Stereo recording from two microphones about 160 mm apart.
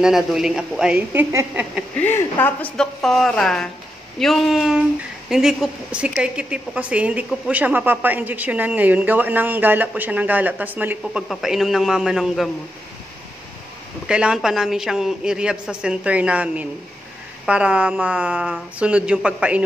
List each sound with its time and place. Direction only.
0.0 s a woman's voice: centre (ahead or behind)
1.3 s a woman's voice: 20° right (ahead or behind)
2.0 s a woman's voice: 15° left (ahead or behind); by 12.4 s 5° right (ahead or behind)
14.0 s a woman's voice: 5° right (ahead or behind)